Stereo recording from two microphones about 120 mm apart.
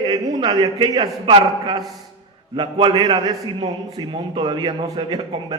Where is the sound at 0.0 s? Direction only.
35° right (ahead or behind).